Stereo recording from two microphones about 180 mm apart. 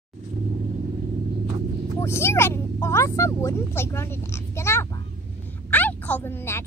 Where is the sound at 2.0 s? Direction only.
15° left (ahead or behind).